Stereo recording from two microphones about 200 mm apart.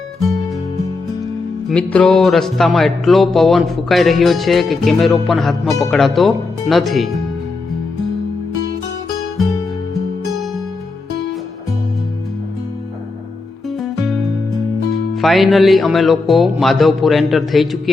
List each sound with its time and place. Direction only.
1.7 s music: 5° left (ahead or behind)
15.1 s music: centre (ahead or behind)